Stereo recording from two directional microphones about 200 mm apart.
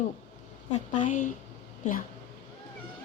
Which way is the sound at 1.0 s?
40° left (ahead or behind).